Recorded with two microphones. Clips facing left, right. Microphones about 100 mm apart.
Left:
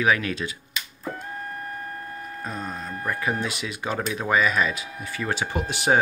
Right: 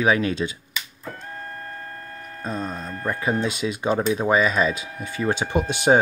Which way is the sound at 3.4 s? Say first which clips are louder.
Right 6 dB; 25° right (ahead or behind).